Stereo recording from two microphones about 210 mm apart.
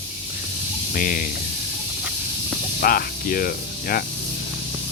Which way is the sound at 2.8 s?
45° left (ahead or behind).